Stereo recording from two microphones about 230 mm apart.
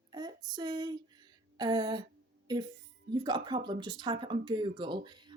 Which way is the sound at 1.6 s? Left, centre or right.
Centre.